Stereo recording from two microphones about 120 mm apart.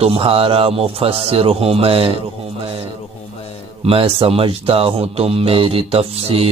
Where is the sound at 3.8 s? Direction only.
50° right (ahead or behind).